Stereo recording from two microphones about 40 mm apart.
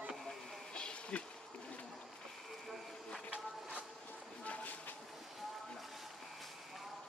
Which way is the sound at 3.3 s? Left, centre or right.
Right.